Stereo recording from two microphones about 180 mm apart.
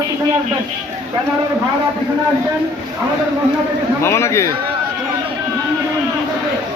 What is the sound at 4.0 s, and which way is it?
Speech, 15° left (ahead or behind).